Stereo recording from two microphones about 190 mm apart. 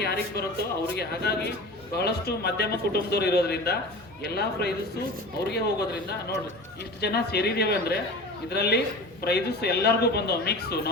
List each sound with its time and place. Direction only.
0.0 s a man's voice: 55° left (ahead or behind)